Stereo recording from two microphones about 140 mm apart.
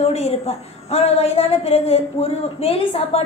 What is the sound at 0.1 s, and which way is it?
A woman's voice, 50° left (ahead or behind).